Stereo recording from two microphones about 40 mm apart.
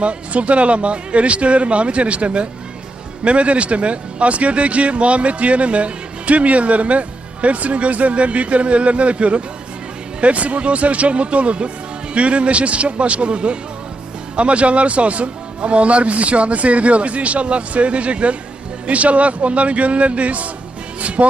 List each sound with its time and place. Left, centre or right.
0.0 s a man's voice: right